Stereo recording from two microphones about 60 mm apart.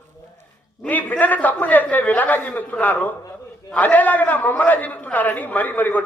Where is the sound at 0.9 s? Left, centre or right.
Left.